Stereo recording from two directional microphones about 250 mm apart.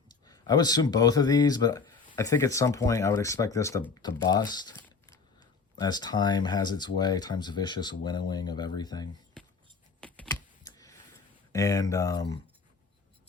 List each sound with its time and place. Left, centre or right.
0.1 s speech: centre
10.0 s typing: centre
10.7 s a sound: centre
11.5 s speech: centre